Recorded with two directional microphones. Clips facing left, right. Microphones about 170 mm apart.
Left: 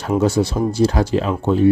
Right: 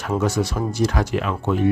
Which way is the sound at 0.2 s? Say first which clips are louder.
Left 6 dB; 30° left (ahead or behind).